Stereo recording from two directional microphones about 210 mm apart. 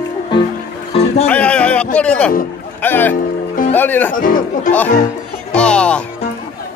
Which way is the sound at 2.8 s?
10° left (ahead or behind).